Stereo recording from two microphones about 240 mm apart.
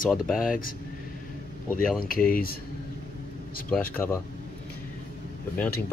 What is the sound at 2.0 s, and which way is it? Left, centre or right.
Speech, left.